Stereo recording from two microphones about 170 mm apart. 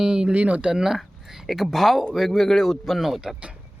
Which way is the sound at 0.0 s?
5° right (ahead or behind).